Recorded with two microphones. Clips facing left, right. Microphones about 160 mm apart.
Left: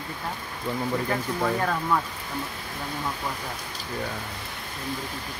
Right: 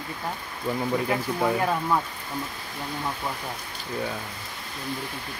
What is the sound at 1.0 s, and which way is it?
Speech, 15° right (ahead or behind).